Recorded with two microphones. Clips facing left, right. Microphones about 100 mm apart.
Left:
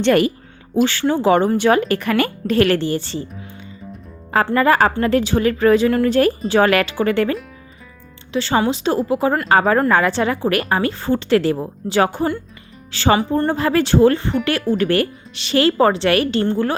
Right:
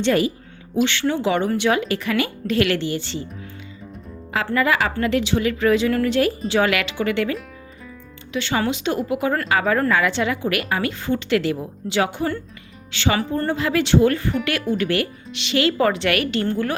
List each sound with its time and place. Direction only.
0.0 s speech: 60° left (ahead or behind)
0.9 s a woman's voice: 40° left (ahead or behind)
4.5 s a woman's voice: 40° left (ahead or behind)
13.1 s a woman's voice: 20° left (ahead or behind)
13.5 s a woman's voice: 40° left (ahead or behind)